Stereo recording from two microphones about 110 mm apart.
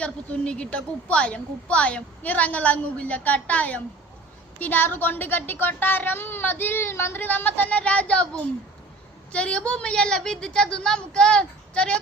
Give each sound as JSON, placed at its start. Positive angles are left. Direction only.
{"t": 0.0, "sound": "a woman's voice", "side_deg": 10}